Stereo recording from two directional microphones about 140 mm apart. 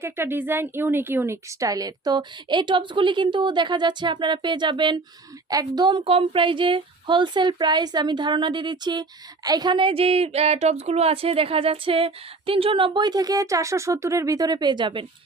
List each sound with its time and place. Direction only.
0.0 s speech: 15° right (ahead or behind); by 15.0 s 35° right (ahead or behind)